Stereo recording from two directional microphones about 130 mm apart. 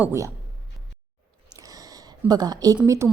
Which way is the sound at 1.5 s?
30° right (ahead or behind).